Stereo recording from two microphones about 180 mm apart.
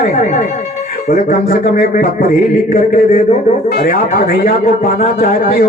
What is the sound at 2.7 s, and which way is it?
A man's voice, 50° left (ahead or behind).